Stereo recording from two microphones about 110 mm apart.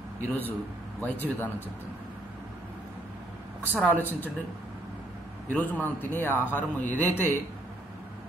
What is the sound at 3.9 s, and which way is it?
Speech, 15° left (ahead or behind).